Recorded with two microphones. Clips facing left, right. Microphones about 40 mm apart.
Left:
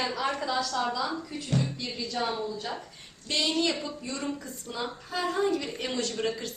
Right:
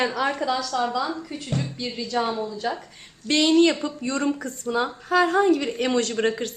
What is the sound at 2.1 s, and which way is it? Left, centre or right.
Speech, right.